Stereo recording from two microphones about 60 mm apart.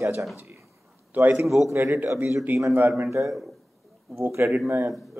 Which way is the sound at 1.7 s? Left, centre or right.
Right.